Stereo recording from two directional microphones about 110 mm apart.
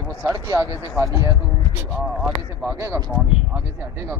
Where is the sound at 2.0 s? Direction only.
Centre (ahead or behind).